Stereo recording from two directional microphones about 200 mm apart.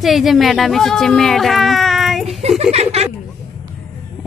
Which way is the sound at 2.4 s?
30° right (ahead or behind).